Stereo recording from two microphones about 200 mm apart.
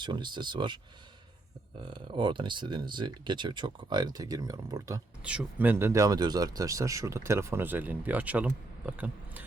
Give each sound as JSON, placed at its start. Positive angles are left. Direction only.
{"t": 0.0, "sound": "speech", "side_deg": -20}
{"t": 1.8, "sound": "speech", "side_deg": -25}
{"t": 5.2, "sound": "speech", "side_deg": -5}